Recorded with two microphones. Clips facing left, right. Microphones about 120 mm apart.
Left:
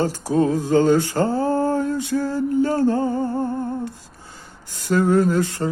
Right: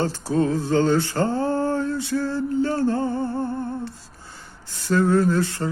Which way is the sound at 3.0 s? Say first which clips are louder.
Left 3 dB; 40° left (ahead or behind).